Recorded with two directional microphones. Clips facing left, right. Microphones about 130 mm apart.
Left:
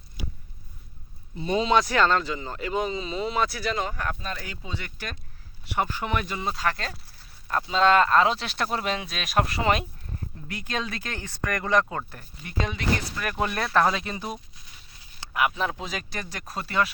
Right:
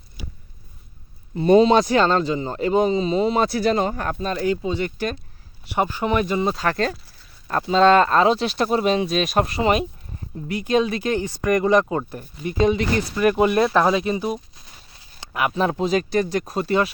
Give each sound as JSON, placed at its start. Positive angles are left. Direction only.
{"t": 1.4, "sound": "speech", "side_deg": -50}
{"t": 1.6, "sound": "speech", "side_deg": -25}
{"t": 14.3, "sound": "a sound", "side_deg": -35}
{"t": 15.2, "sound": "speech", "side_deg": -30}